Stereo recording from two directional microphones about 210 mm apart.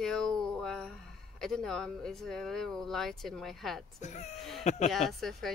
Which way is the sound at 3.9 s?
35° left (ahead or behind).